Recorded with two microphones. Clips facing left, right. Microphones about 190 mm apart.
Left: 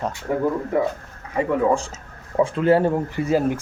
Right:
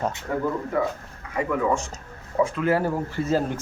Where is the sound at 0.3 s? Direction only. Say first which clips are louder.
Left 6 dB; 20° left (ahead or behind).